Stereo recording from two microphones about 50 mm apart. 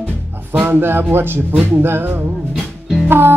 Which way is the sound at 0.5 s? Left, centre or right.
Right.